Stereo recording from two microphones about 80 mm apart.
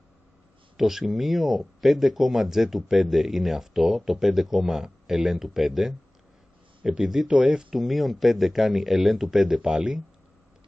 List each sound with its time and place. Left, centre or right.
0.7 s speech: centre